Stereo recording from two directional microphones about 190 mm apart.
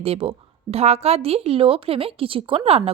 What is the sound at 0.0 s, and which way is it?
Speech, 30° right (ahead or behind).